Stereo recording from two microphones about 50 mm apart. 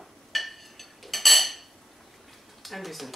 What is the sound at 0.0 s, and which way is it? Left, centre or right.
Dishes, centre.